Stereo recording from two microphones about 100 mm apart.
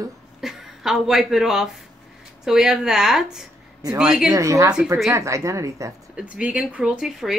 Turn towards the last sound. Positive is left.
turn(degrees=-5)  # may be behind; listen again after turning